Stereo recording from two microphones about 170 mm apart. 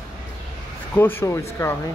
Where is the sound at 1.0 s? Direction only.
15° left (ahead or behind).